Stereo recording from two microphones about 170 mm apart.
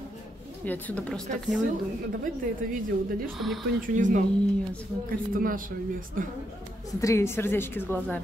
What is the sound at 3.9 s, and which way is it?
Speech, 45° right (ahead or behind).